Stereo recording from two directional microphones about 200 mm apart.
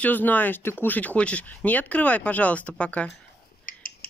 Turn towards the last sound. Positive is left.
turn(degrees=45)  # may be behind; listen again after turning